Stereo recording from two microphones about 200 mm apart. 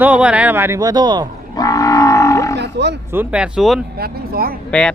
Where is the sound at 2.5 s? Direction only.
60° right (ahead or behind).